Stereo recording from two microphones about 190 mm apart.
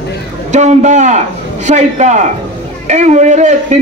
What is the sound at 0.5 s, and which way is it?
A man's voice, 40° right (ahead or behind).